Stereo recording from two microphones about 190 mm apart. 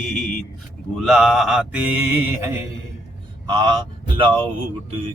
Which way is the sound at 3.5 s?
25° right (ahead or behind).